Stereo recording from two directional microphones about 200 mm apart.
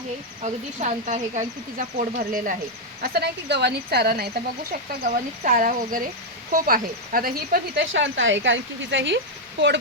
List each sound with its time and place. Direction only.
0.4 s speech: 35° right (ahead or behind)
3.0 s speech: 55° right (ahead or behind)
4.7 s speech: 40° right (ahead or behind); by 9.7 s 60° right (ahead or behind)